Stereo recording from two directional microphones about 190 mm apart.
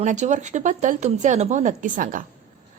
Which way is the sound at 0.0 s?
40° right (ahead or behind).